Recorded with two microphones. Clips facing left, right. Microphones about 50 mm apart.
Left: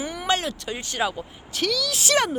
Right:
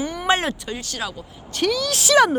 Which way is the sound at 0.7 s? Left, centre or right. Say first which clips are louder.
Left 3 dB; left.